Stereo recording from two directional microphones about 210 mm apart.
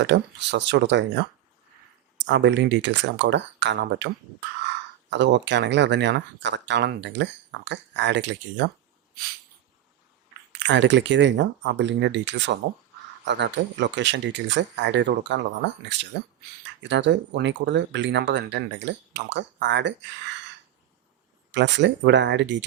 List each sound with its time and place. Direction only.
0.0 s speech: 55° right (ahead or behind)
5.1 s speech: 60° right (ahead or behind)
10.6 s speech: 55° right (ahead or behind)
21.5 s speech: 55° right (ahead or behind)